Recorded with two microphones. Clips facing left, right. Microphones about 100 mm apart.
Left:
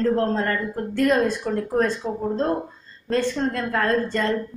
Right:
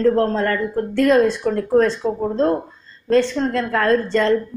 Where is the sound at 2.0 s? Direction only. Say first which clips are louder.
Right 6 dB; 45° right (ahead or behind).